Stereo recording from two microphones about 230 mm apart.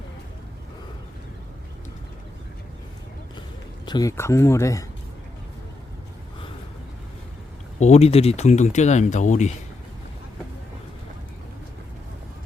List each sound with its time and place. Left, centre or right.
3.8 s speech: centre
7.8 s speech: left